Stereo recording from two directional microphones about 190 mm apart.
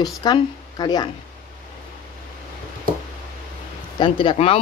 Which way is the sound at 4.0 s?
25° left (ahead or behind).